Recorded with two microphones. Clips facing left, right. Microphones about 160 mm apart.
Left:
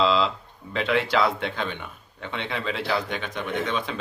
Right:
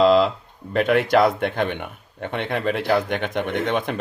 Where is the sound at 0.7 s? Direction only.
50° right (ahead or behind).